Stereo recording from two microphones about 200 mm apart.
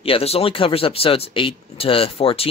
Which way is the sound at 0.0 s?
30° left (ahead or behind).